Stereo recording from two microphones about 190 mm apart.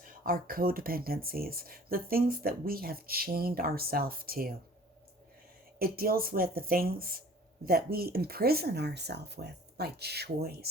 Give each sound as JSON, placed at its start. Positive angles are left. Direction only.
{"t": 0.0, "sound": "speech", "side_deg": -45}
{"t": 5.8, "sound": "speech", "side_deg": -50}